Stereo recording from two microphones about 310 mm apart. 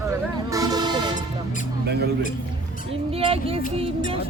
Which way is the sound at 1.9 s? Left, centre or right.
Right.